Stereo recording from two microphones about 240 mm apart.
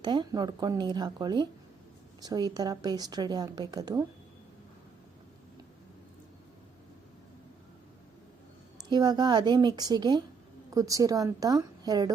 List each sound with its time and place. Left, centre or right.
0.0 s a woman's voice: centre
8.9 s a woman's voice: centre